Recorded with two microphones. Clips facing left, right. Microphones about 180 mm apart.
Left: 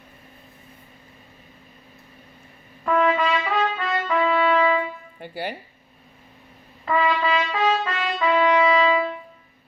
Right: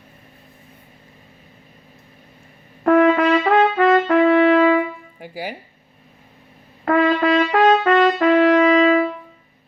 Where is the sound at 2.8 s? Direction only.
60° right (ahead or behind).